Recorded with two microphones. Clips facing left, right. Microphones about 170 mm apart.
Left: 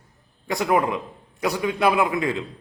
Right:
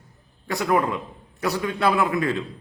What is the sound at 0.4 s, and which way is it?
A man's voice, 20° left (ahead or behind).